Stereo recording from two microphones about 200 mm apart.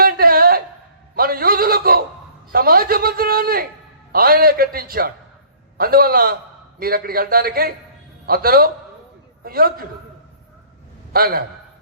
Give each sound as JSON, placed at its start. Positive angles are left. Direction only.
{"t": 0.0, "sound": "a sound", "side_deg": -45}
{"t": 4.1, "sound": "a man's voice", "side_deg": -50}
{"t": 11.1, "sound": "a man's voice", "side_deg": -45}